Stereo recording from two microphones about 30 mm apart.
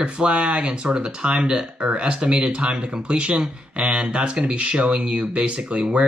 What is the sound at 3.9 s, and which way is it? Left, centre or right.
Speech, right.